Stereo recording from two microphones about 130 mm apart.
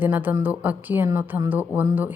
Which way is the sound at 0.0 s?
15° right (ahead or behind).